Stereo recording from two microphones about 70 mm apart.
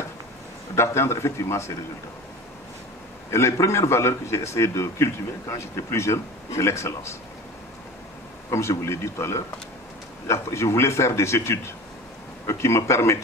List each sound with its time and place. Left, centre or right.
0.7 s a man's voice: left
3.3 s a man's voice: left
8.5 s a man's voice: left